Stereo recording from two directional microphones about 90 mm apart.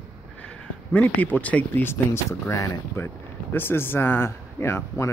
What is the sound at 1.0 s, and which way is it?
Speech, 20° left (ahead or behind).